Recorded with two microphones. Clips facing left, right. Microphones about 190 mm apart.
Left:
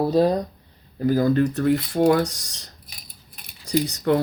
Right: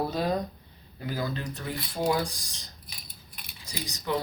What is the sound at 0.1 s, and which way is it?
Speech, 35° left (ahead or behind).